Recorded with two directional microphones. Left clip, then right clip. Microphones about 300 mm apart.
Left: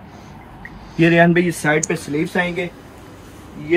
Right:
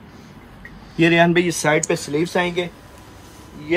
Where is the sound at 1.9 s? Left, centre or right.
Right.